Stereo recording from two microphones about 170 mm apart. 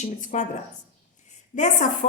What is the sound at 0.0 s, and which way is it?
Speech, 50° left (ahead or behind).